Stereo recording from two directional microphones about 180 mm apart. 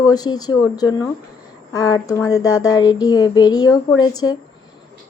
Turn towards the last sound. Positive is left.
turn(degrees=20)  # may be behind; listen again after turning